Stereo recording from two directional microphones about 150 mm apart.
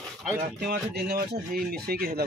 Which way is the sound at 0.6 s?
90° right.